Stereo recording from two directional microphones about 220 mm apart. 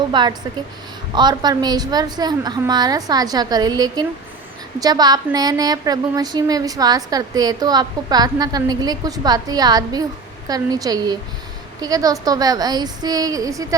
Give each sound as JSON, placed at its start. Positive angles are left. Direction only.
{"t": 0.1, "sound": "a woman's voice", "side_deg": -20}